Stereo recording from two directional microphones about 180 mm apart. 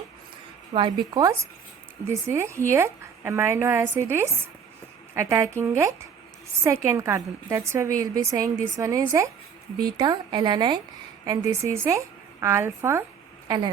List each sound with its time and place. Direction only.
0.7 s a woman's voice: 25° right (ahead or behind)